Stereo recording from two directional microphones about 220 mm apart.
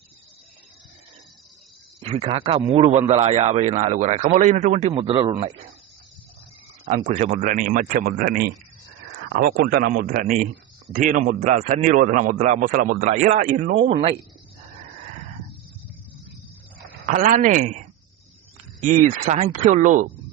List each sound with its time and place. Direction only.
2.0 s speech: 25° right (ahead or behind)
6.8 s speech: 30° right (ahead or behind)
9.2 s a sound: 45° right (ahead or behind)
9.6 s speech: 45° right (ahead or behind)
17.1 s speech: 35° right (ahead or behind)
18.8 s speech: 35° right (ahead or behind)